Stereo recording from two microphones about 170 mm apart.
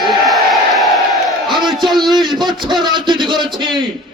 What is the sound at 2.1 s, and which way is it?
A man's voice, 25° right (ahead or behind).